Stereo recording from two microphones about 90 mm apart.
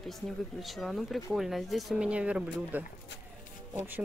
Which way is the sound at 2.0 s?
10° right (ahead or behind).